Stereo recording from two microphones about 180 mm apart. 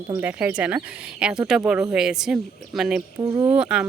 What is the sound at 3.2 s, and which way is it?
Speech, 20° right (ahead or behind).